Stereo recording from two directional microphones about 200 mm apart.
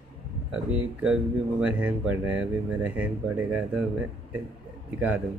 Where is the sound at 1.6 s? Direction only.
5° right (ahead or behind).